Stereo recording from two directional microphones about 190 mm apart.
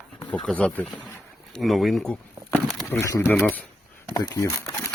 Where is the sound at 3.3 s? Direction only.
Centre (ahead or behind).